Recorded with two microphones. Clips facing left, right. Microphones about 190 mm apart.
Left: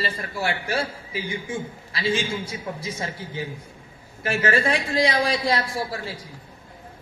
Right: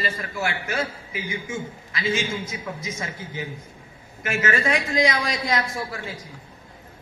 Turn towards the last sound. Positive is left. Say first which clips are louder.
# left 2 dB
turn(degrees=35)  # may be behind; listen again after turning